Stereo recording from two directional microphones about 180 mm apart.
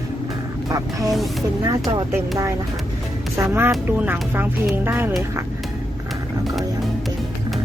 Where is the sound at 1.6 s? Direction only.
20° right (ahead or behind).